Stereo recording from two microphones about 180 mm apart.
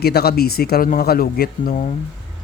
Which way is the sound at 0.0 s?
60° left (ahead or behind).